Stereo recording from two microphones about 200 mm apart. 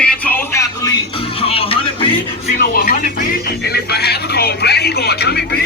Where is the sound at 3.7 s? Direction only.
55° left (ahead or behind).